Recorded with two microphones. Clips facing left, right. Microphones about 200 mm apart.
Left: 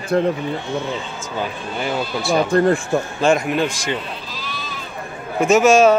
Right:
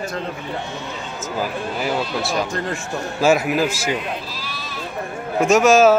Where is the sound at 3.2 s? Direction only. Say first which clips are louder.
Right 2 dB; 5° right (ahead or behind).